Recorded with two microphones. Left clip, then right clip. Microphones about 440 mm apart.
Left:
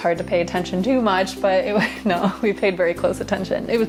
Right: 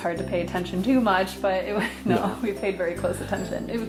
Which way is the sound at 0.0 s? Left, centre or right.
Left.